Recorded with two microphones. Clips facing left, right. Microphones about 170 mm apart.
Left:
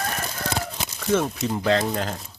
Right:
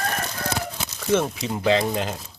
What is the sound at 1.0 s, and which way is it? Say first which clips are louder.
Speech: even; 5° right (ahead or behind).